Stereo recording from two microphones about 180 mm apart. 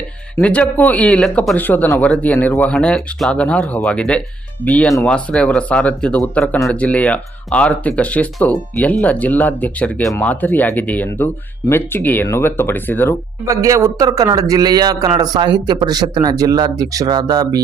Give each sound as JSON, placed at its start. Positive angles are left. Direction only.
{"t": 0.3, "sound": "speech", "side_deg": 5}
{"t": 13.4, "sound": "a man's voice", "side_deg": -20}